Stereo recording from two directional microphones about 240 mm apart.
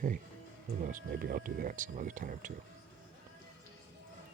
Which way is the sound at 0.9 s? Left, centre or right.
Right.